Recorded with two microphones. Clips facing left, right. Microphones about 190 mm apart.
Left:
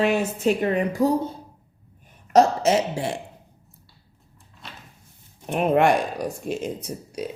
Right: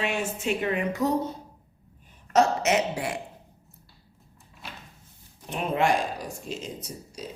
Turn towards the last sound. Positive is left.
turn(degrees=60)  # may be behind; listen again after turning